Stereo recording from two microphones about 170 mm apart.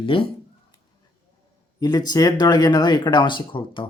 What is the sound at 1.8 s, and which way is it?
Speech, 25° left (ahead or behind).